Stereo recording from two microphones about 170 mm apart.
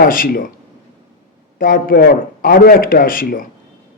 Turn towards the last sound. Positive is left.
turn(degrees=55)  # may be behind; listen again after turning